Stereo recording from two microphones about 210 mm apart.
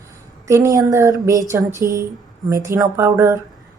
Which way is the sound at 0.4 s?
15° right (ahead or behind).